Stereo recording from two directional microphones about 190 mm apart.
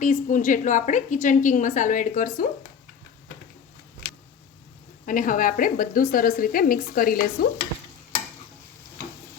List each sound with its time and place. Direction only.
0.0 s a woman's voice: 40° left (ahead or behind)
5.0 s a woman's voice: 45° left (ahead or behind)